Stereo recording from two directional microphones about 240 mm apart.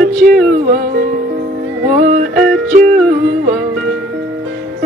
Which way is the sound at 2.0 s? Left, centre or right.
Right.